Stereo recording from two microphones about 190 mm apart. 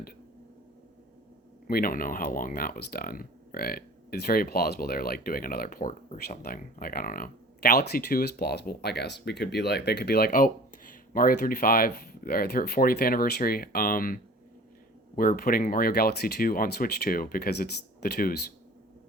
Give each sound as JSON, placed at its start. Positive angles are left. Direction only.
{"t": 1.6, "sound": "speech", "side_deg": 50}